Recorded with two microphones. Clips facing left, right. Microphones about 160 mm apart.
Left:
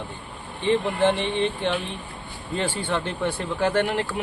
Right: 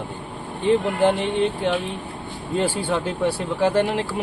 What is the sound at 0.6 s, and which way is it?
Speech, 5° right (ahead or behind).